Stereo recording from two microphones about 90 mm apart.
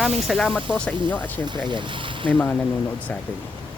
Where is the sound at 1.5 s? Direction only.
60° right (ahead or behind).